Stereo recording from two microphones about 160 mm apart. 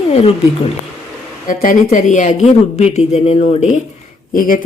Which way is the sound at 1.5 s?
60° left (ahead or behind).